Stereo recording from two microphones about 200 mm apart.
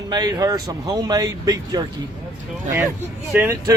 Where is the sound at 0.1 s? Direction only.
20° right (ahead or behind).